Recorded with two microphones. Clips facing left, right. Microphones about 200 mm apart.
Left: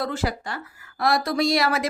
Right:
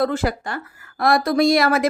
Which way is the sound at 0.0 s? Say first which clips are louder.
Right 6 dB; 50° right (ahead or behind).